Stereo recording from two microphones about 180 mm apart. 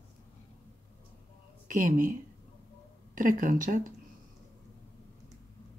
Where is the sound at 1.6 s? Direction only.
45° right (ahead or behind).